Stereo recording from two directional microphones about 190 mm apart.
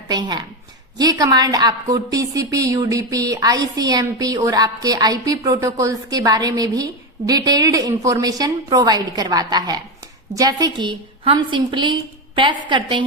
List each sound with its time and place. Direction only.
0.1 s a woman's voice: 20° right (ahead or behind)